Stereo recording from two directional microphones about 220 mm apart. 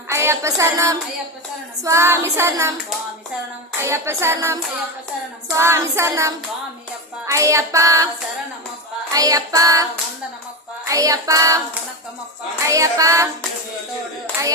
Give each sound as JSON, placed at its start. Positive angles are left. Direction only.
{"t": 0.1, "sound": "music", "side_deg": -10}
{"t": 1.8, "sound": "child singing", "side_deg": -10}
{"t": 3.8, "sound": "child singing", "side_deg": -10}
{"t": 9.1, "sound": "child singing", "side_deg": -15}
{"t": 10.8, "sound": "child singing", "side_deg": -15}